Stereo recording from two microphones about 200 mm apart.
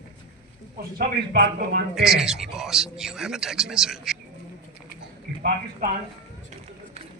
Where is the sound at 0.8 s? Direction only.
50° right (ahead or behind).